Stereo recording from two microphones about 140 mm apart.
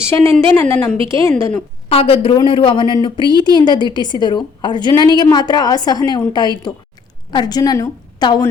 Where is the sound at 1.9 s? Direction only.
45° left (ahead or behind).